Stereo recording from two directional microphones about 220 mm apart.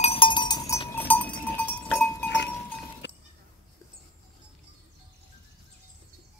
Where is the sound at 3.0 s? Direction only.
50° left (ahead or behind).